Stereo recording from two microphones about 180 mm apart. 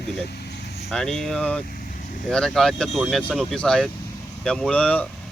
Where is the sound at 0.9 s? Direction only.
5° left (ahead or behind).